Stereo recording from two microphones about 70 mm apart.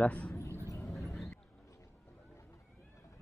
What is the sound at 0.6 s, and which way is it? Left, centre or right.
Vehicle, left.